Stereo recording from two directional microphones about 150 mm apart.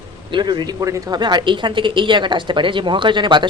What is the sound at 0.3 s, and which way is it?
Speech, 30° right (ahead or behind).